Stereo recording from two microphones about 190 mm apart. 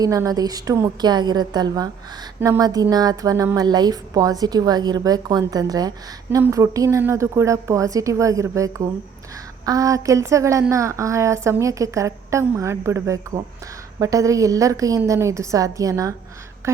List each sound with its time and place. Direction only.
0.0 s a woman's voice: 20° right (ahead or behind)